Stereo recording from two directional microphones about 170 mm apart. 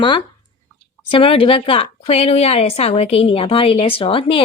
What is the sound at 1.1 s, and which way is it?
A woman's voice, 30° left (ahead or behind).